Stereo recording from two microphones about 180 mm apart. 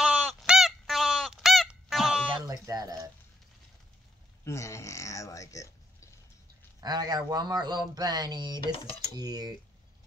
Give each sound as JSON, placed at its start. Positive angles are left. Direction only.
{"t": 0.0, "sound": "goose", "side_deg": -5}
{"t": 2.4, "sound": "speech", "side_deg": -20}
{"t": 4.5, "sound": "speech", "side_deg": 15}
{"t": 6.8, "sound": "speech", "side_deg": -20}